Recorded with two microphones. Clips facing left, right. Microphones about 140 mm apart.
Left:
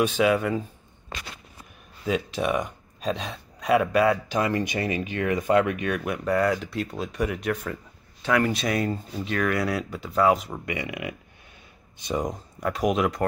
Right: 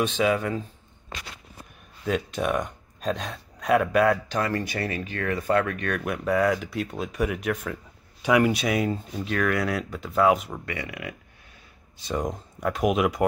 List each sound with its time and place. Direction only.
0.0 s speech: 5° left (ahead or behind)
2.0 s speech: centre (ahead or behind)
4.4 s speech: 15° left (ahead or behind); by 7.8 s centre (ahead or behind)
8.2 s speech: 15° right (ahead or behind)
10.6 s speech: 15° left (ahead or behind)
12.2 s speech: centre (ahead or behind)